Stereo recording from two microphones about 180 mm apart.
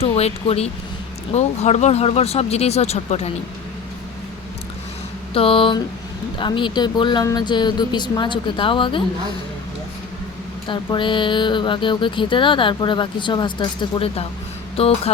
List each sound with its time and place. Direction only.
0.0 s speech: 35° left (ahead or behind)
5.3 s speech: 30° left (ahead or behind)
10.7 s speech: 25° left (ahead or behind)